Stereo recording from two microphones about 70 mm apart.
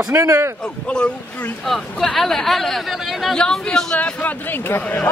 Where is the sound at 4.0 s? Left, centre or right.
Left.